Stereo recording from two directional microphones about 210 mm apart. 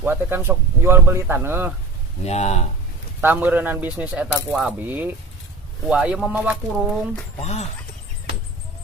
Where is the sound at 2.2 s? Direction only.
30° left (ahead or behind).